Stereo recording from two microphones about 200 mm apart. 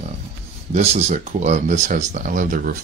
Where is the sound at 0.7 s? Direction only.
35° right (ahead or behind).